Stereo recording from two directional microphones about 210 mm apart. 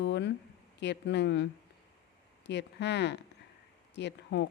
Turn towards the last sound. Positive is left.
turn(degrees=55)  # may be behind; listen again after turning